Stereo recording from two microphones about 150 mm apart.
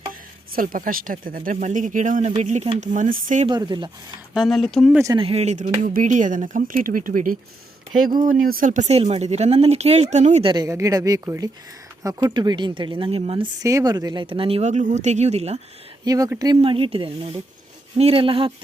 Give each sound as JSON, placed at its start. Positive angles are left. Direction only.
{"t": 0.1, "sound": "speech", "side_deg": -70}
{"t": 3.4, "sound": "speech", "side_deg": -30}
{"t": 4.4, "sound": "speech", "side_deg": 0}
{"t": 5.1, "sound": "speech", "side_deg": -40}
{"t": 5.8, "sound": "speech", "side_deg": -60}
{"t": 10.4, "sound": "speech", "side_deg": -30}
{"t": 13.6, "sound": "speech", "side_deg": -20}
{"t": 16.0, "sound": "speech", "side_deg": -25}
{"t": 16.6, "sound": "speech", "side_deg": -40}